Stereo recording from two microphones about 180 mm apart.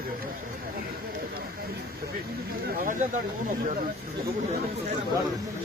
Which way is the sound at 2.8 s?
45° right (ahead or behind).